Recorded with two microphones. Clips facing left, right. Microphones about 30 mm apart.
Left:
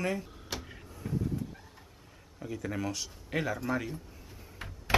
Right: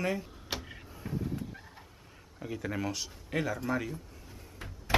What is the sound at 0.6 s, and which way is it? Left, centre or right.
Vehicle, centre.